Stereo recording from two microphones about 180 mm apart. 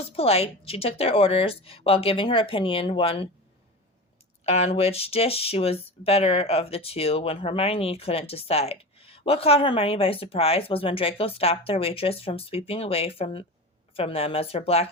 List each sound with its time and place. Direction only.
0.2 s speech: 35° left (ahead or behind)
4.4 s speech: 35° left (ahead or behind)